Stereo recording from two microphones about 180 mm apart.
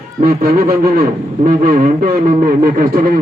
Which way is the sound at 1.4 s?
55° right (ahead or behind).